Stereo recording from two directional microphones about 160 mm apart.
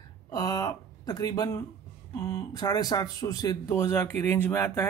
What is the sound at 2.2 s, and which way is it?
Speech, 20° left (ahead or behind).